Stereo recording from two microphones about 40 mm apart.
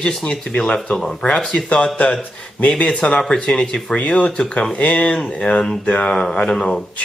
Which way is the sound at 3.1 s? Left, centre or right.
Centre.